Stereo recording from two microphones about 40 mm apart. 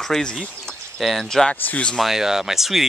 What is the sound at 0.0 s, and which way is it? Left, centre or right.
Speech, centre.